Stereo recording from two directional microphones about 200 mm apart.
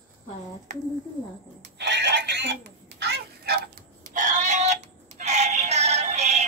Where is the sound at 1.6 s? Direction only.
60° right (ahead or behind).